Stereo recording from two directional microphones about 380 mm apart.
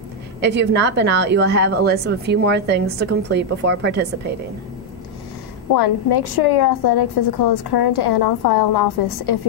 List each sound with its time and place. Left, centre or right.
0.4 s a woman's voice: right
5.8 s a woman's voice: left